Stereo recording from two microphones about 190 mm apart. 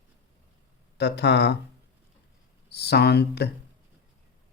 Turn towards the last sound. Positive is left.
turn(degrees=60)  # may be behind; listen again after turning